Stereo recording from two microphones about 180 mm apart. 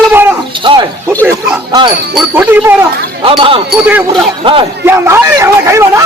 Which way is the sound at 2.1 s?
10° right (ahead or behind).